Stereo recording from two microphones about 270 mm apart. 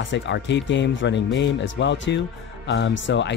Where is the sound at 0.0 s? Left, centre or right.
Left.